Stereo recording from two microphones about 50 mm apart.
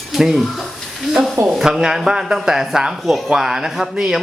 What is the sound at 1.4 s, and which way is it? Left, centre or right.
Speech, centre.